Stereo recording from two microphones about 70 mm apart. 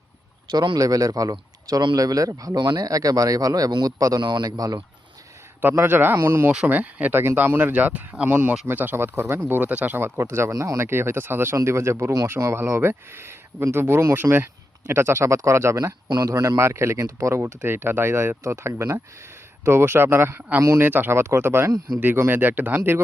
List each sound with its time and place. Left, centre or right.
0.5 s speech: right
5.7 s speech: right
6.7 s speech: right
10.0 s speech: right
17.6 s speech: right
20.6 s speech: right
20.8 s speech: right